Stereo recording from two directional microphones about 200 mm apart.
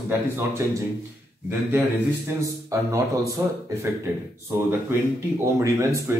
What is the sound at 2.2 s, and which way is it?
A man's voice, 15° right (ahead or behind).